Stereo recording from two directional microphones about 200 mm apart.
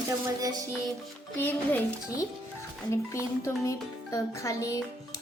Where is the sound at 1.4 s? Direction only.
10° left (ahead or behind).